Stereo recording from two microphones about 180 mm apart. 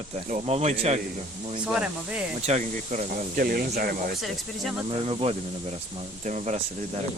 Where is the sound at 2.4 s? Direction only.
40° right (ahead or behind).